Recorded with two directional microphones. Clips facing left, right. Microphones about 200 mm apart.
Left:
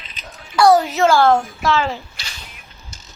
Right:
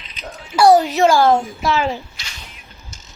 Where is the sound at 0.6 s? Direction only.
15° right (ahead or behind).